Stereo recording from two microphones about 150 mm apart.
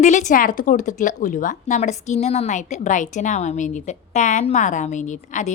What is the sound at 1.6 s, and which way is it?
A woman's voice, 45° left (ahead or behind).